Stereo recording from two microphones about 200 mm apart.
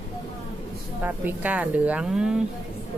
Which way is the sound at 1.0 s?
10° right (ahead or behind).